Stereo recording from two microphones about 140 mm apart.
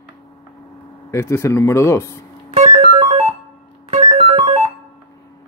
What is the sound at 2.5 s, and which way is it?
Music, 45° right (ahead or behind).